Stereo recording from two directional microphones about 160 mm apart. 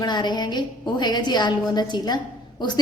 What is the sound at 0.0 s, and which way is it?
A woman's voice, 25° left (ahead or behind).